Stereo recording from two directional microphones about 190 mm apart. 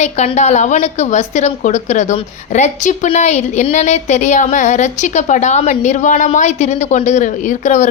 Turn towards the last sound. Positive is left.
turn(degrees=40)  # may be behind; listen again after turning